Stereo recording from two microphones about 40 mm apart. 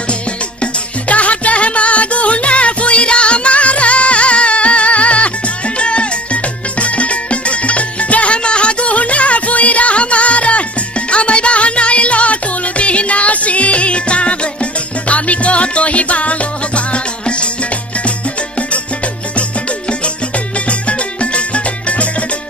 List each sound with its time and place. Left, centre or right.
1.0 s music: left